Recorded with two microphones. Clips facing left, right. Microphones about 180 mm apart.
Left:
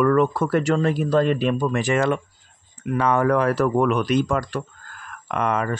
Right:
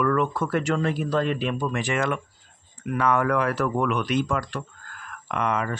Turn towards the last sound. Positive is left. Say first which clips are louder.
# left 3 dB
turn(degrees=45)  # may be behind; listen again after turning